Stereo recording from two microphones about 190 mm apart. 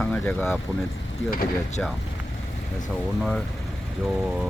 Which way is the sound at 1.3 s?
50° left (ahead or behind).